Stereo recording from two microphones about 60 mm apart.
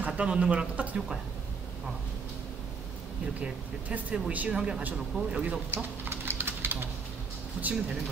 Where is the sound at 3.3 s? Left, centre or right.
Centre.